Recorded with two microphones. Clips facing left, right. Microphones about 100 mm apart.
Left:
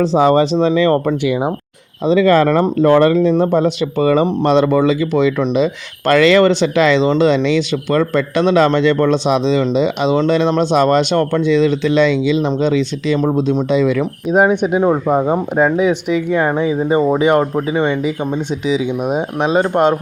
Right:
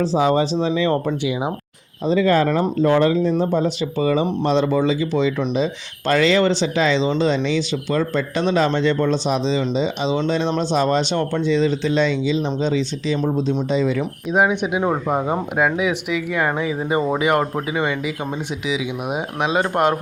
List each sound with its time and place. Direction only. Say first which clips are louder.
0.0 s speech: left 6 dB; 70° left (ahead or behind)
0.6 s speech: left 7 dB; 90° left
0.9 s speech: left 6 dB; 55° left (ahead or behind)
2.0 s speech: left 5 dB; 85° left
3.3 s speech: left 5 dB; 60° left (ahead or behind)
5.5 s speech: left 6 dB; 75° left (ahead or behind)
7.2 s speech: left 6 dB; 80° left
7.9 s speech: left 6 dB; 60° left (ahead or behind)
14.8 s speech: left 6 dB; 15° left (ahead or behind)
15.5 s speech: left 6 dB; 35° left (ahead or behind)
19.1 s speech: left 4 dB; 35° left (ahead or behind)